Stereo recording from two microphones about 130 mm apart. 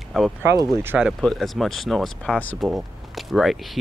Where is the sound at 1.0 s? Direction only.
5° right (ahead or behind).